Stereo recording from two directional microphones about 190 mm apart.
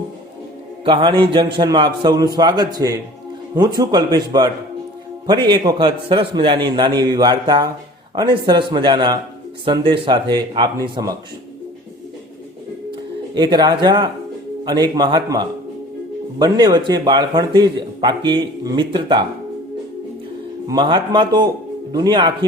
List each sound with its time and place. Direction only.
0.9 s speech: 25° right (ahead or behind)
13.3 s speech: 20° right (ahead or behind)
20.7 s speech: 25° right (ahead or behind)